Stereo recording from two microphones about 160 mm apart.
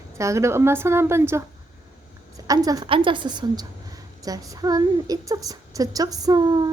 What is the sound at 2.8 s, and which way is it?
A woman's voice, 35° right (ahead or behind).